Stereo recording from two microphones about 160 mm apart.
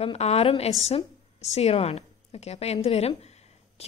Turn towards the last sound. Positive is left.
turn(degrees=40)  # may be behind; listen again after turning